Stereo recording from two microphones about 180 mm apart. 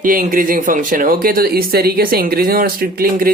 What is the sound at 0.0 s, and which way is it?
A man's voice, 50° right (ahead or behind).